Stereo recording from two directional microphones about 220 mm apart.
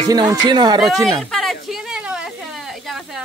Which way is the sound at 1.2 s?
Centre (ahead or behind).